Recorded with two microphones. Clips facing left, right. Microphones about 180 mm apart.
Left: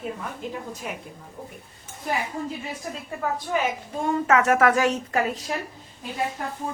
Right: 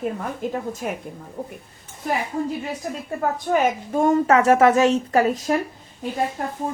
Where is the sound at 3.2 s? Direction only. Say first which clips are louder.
Right 5 dB; 45° right (ahead or behind); by 5.0 s 25° right (ahead or behind).